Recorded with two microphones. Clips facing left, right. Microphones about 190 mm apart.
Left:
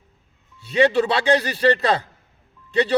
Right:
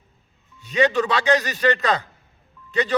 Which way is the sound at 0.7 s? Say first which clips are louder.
Left 2 dB; 30° left (ahead or behind).